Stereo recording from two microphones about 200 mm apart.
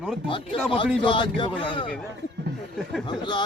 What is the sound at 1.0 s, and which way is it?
Speech, 25° left (ahead or behind).